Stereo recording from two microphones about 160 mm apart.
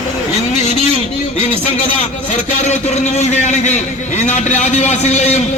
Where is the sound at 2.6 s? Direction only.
45° left (ahead or behind).